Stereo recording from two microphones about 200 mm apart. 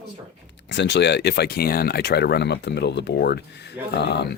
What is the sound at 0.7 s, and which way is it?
Speech, 60° left (ahead or behind).